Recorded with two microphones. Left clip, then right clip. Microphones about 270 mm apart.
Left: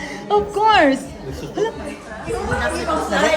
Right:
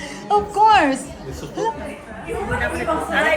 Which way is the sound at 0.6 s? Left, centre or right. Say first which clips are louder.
Even; centre.